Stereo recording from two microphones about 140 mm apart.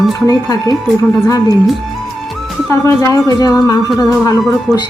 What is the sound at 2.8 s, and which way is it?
Speech, 25° left (ahead or behind).